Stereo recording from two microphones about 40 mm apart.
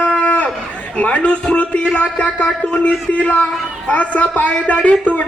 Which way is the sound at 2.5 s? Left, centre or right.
Left.